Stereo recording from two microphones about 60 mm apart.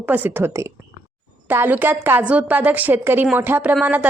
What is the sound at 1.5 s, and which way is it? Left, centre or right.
Speech, right.